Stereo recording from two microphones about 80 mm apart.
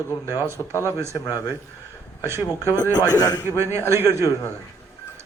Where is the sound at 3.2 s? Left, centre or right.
Left.